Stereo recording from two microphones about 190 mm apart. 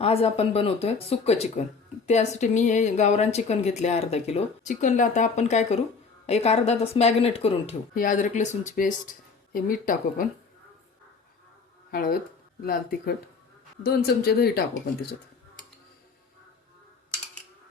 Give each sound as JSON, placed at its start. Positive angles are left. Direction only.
{"t": 0.0, "sound": "a woman's voice", "side_deg": 30}
{"t": 7.9, "sound": "speech", "side_deg": 45}
{"t": 11.9, "sound": "speech", "side_deg": 50}